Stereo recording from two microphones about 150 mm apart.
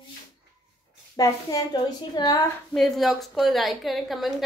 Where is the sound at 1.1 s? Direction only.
25° left (ahead or behind).